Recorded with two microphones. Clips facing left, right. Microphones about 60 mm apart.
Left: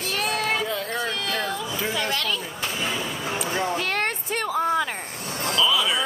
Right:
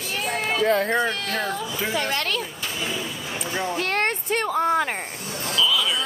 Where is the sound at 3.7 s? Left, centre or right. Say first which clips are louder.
Right 2 dB; right.